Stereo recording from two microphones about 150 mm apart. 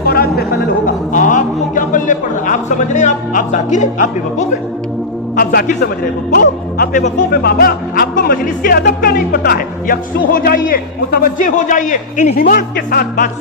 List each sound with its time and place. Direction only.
0.1 s a sound: 90° left
0.9 s a man's voice: 60° left (ahead or behind)
5.4 s a man's voice: 85° left
6.3 s speech: 75° left (ahead or behind)